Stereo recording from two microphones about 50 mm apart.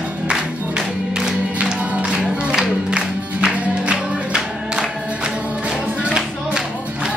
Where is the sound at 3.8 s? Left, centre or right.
Centre.